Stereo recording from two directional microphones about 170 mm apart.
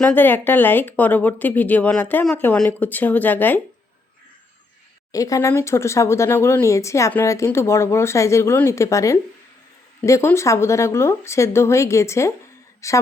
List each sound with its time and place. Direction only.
0.0 s speech: 10° left (ahead or behind)
5.1 s speech: 20° left (ahead or behind)